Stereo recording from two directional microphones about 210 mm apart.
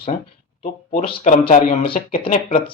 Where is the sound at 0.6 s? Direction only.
40° left (ahead or behind).